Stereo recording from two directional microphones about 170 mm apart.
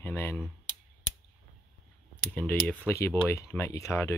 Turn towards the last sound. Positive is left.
turn(degrees=15)  # may be behind; listen again after turning